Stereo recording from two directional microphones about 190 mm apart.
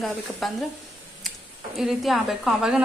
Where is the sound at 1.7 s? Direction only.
Centre (ahead or behind).